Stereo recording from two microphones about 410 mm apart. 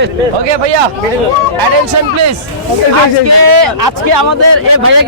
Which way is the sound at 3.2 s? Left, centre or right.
Right.